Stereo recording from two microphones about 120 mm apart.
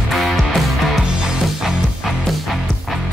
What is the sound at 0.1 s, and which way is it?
Music, centre (ahead or behind).